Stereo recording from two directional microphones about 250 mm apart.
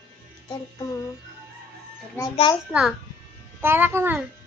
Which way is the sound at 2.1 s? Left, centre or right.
Centre.